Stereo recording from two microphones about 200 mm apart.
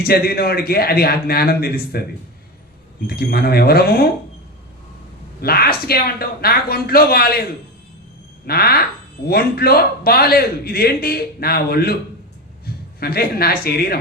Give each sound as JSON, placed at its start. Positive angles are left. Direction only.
{"t": 0.1, "sound": "a man's voice", "side_deg": 50}
{"t": 3.1, "sound": "a man's voice", "side_deg": 50}
{"t": 5.4, "sound": "a man's voice", "side_deg": 50}
{"t": 8.4, "sound": "a man's voice", "side_deg": 50}